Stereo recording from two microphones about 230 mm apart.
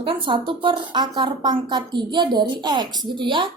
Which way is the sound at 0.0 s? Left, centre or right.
Right.